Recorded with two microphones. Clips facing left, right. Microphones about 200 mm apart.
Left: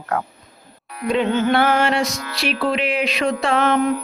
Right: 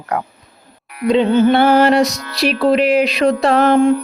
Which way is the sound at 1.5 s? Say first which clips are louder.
Right 6 dB; 30° right (ahead or behind).